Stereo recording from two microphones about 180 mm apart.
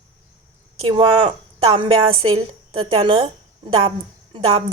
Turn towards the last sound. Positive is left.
turn(degrees=-35)  # may be behind; listen again after turning